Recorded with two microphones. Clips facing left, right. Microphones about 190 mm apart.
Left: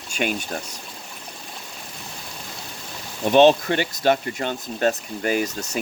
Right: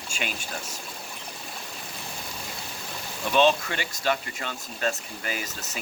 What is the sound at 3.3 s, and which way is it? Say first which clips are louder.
Speech: left 7 dB; 55° left (ahead or behind).